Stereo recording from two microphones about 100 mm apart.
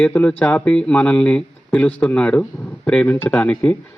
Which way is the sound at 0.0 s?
10° left (ahead or behind).